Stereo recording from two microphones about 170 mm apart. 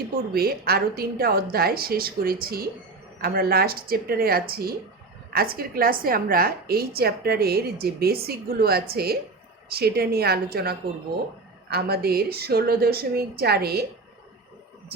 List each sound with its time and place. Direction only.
0.3 s a woman's voice: 65° right (ahead or behind)